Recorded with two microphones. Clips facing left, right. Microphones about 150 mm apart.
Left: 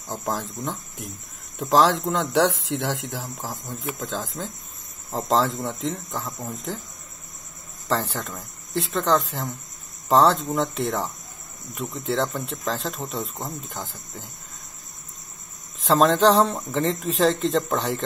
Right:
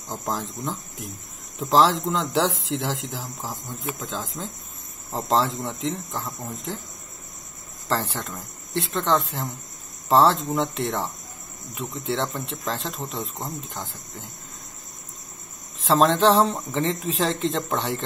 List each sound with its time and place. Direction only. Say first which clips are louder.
0.1 s speech: left 1 dB; centre (ahead or behind)
7.9 s speech: left 1 dB; centre (ahead or behind)
15.8 s speech: left 1 dB; centre (ahead or behind)